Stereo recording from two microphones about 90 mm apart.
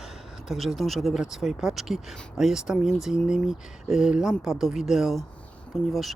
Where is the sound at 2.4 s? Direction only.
5° right (ahead or behind).